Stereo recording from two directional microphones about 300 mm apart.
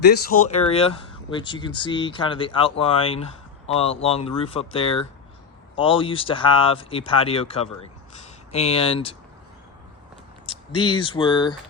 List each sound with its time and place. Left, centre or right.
0.0 s speech: left
10.4 s speech: centre